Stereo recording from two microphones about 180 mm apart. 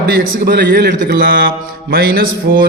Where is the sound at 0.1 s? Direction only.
55° right (ahead or behind).